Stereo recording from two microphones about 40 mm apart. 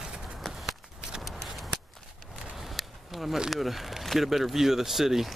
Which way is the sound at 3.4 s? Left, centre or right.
Centre.